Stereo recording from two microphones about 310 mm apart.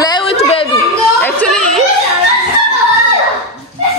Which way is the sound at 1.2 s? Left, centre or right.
Centre.